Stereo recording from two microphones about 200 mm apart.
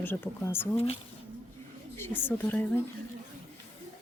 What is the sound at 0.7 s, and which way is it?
Speech, 30° left (ahead or behind).